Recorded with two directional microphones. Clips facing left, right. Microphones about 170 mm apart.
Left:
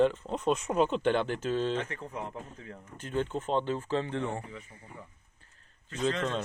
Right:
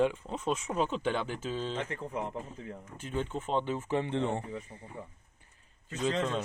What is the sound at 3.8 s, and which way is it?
Speech, 20° right (ahead or behind).